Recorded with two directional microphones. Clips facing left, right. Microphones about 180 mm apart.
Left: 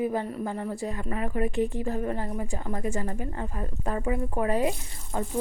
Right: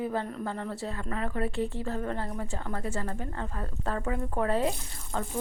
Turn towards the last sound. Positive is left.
turn(degrees=10)  # may be behind; listen again after turning